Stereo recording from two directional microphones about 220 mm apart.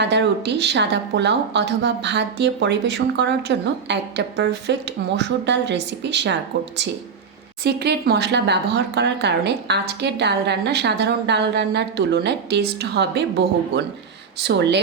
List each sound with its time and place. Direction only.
0.0 s a woman's voice: 50° right (ahead or behind)
7.6 s a woman's voice: 45° right (ahead or behind)
14.4 s a woman's voice: 50° right (ahead or behind)